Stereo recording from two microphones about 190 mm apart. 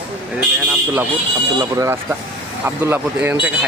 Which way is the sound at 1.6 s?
15° right (ahead or behind).